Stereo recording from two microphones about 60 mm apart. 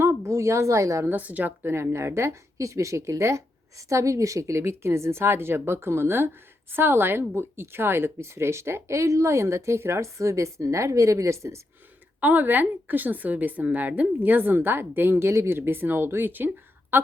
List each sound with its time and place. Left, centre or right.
0.0 s speech: right
1.0 s a woman's voice: right
1.6 s a woman's voice: right
12.2 s a woman's voice: right